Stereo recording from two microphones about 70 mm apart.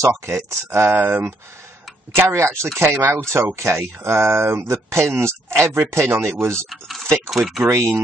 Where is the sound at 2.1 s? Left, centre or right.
Right.